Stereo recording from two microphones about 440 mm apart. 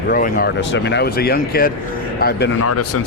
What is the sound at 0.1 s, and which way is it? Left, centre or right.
Speech, centre.